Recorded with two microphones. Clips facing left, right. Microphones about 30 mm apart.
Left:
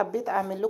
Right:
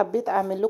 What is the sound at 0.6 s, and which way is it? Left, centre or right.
Speech, right.